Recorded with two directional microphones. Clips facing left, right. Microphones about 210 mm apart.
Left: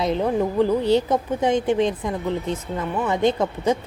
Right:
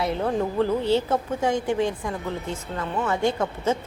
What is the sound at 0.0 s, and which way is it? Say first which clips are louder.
A woman's voice: left 3 dB; 15° left (ahead or behind).